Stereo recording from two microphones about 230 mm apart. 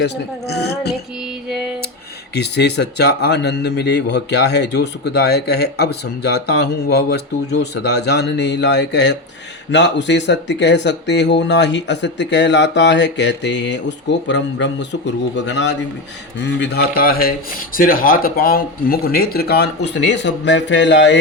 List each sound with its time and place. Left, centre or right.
0.0 s a man's voice: left
2.3 s a man's voice: left